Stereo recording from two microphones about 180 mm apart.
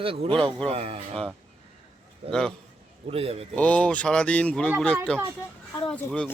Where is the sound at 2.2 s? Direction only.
30° right (ahead or behind).